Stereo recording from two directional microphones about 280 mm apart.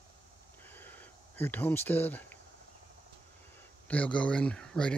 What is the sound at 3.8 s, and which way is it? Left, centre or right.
Speech, centre.